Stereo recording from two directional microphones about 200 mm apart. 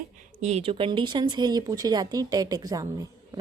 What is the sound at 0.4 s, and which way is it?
A woman's voice, 30° right (ahead or behind).